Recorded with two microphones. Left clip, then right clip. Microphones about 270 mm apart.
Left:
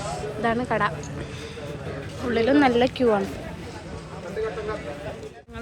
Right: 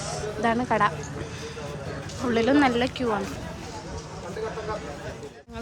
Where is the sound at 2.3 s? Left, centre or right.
Centre.